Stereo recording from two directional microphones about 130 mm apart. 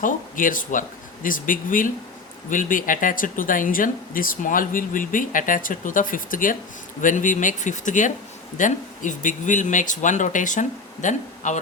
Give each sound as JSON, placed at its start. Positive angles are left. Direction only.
{"t": 0.0, "sound": "speech", "side_deg": 90}
{"t": 7.0, "sound": "speech", "side_deg": 80}